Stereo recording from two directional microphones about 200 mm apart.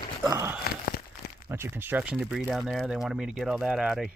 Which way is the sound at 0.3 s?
15° right (ahead or behind).